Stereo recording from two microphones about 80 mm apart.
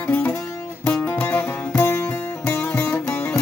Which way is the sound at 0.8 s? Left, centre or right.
Left.